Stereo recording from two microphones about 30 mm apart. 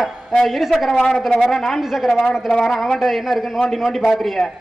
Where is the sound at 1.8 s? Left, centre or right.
Centre.